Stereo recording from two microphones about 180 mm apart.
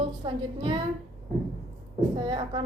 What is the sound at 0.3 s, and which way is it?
Speech, 30° right (ahead or behind).